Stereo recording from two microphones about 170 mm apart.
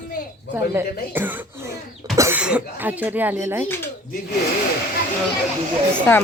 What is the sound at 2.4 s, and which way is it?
Speech, 10° right (ahead or behind).